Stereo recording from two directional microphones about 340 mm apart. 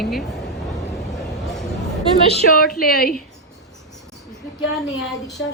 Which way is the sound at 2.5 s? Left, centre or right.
Left.